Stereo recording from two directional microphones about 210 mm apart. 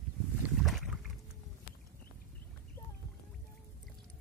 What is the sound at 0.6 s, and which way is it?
Boat, centre (ahead or behind).